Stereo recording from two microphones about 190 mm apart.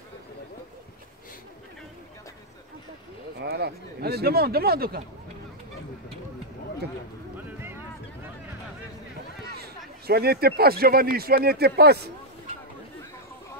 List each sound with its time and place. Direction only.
3.3 s speech: 60° right (ahead or behind)
9.6 s a man's voice: 55° right (ahead or behind)